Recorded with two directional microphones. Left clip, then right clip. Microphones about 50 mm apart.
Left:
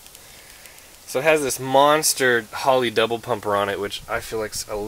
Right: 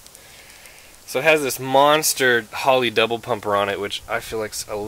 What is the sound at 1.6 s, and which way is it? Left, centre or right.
Speech, centre.